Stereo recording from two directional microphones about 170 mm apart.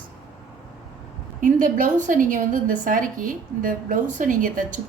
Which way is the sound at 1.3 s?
50° right (ahead or behind).